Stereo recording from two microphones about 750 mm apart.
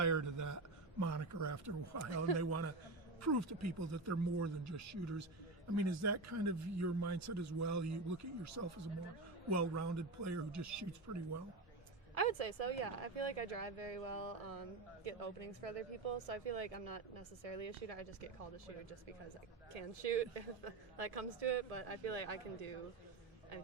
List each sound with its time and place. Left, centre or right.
0.0 s a man's voice: right
12.1 s speech: right